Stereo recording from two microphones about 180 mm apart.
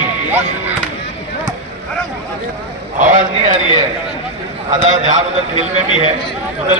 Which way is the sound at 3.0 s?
50° right (ahead or behind).